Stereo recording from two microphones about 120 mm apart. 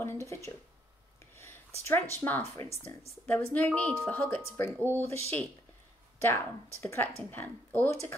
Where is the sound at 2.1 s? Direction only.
15° left (ahead or behind).